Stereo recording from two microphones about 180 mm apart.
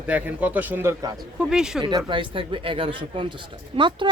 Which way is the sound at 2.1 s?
30° right (ahead or behind).